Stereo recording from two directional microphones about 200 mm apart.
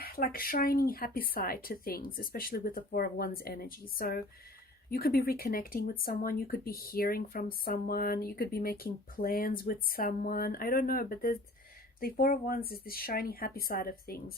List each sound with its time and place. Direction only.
0.0 s speech: 45° left (ahead or behind)